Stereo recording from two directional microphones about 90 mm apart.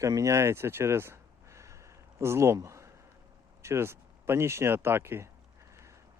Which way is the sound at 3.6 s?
30° right (ahead or behind).